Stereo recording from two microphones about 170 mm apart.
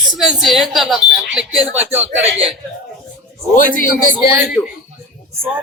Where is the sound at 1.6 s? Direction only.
40° right (ahead or behind).